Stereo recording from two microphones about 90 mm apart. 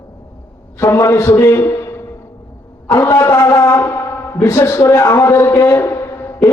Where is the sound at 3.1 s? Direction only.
35° left (ahead or behind).